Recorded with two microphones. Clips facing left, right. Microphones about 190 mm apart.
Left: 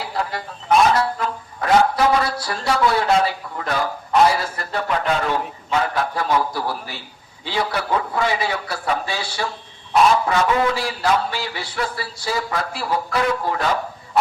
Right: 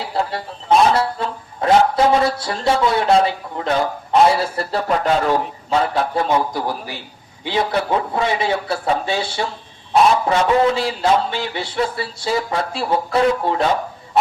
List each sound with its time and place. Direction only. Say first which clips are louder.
0.1 s speech: right 3 dB; 30° right (ahead or behind)
5.8 s speech: right 3 dB; 30° right (ahead or behind)